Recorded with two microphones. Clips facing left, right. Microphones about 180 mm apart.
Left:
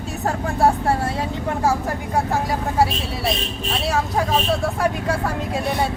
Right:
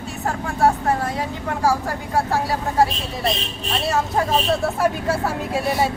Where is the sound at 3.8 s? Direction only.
Centre (ahead or behind).